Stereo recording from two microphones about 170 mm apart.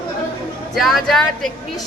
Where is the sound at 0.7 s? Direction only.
Centre (ahead or behind).